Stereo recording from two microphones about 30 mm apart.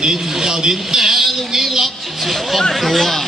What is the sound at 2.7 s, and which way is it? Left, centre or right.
Speech, centre.